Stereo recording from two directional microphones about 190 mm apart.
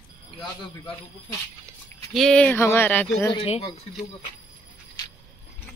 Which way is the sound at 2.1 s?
5° left (ahead or behind).